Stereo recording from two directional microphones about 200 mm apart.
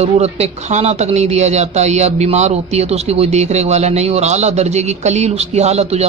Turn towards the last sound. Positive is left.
turn(degrees=-30)  # may be behind; listen again after turning